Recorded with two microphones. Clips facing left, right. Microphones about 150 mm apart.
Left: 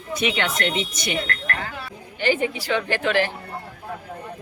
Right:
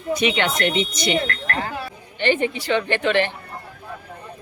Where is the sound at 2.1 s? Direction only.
5° left (ahead or behind).